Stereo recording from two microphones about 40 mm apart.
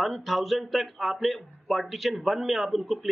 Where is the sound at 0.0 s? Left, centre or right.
Centre.